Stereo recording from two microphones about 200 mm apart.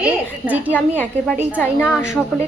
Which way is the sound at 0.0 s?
10° right (ahead or behind).